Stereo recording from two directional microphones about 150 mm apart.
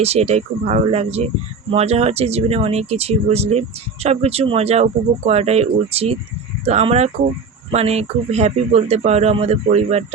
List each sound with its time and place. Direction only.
0.0 s a man's voice: 45° right (ahead or behind)